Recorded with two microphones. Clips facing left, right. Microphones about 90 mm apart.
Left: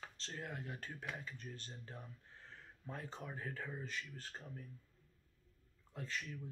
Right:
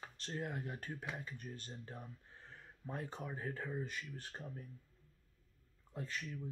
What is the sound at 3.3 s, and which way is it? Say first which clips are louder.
Speech: right 3 dB; 25° right (ahead or behind).